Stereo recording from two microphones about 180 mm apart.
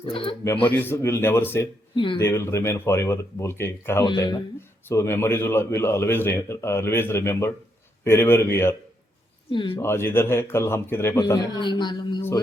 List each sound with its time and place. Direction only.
0.0 s speech: 30° left (ahead or behind)
0.7 s speech: 10° left (ahead or behind)
9.5 s speech: 25° left (ahead or behind)
9.8 s speech: 15° left (ahead or behind)